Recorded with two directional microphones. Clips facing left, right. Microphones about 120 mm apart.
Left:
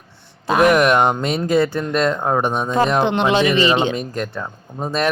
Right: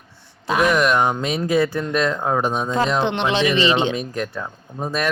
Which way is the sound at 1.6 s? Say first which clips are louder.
Left 2 dB; 25° left (ahead or behind).